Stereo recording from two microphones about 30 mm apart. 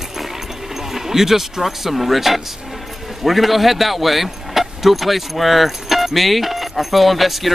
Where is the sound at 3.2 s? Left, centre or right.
Centre.